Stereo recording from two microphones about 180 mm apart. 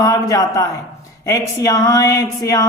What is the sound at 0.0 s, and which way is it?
A man's voice, 20° left (ahead or behind).